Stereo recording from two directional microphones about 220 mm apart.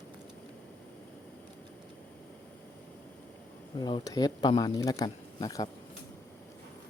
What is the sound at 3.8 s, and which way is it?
Speech, 20° left (ahead or behind).